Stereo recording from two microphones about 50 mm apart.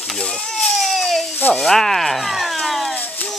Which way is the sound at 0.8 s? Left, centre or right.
Centre.